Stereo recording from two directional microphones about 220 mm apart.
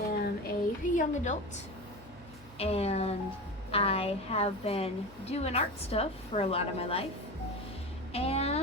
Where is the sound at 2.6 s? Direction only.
30° left (ahead or behind).